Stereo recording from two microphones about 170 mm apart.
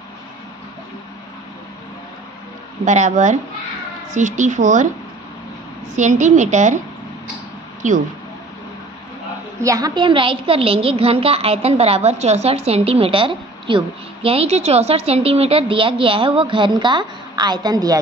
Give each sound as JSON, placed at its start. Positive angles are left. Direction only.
{"t": 2.8, "sound": "a woman's voice", "side_deg": -45}
{"t": 5.9, "sound": "a woman's voice", "side_deg": -45}
{"t": 7.8, "sound": "a woman's voice", "side_deg": -50}
{"t": 9.6, "sound": "a child's voice", "side_deg": -20}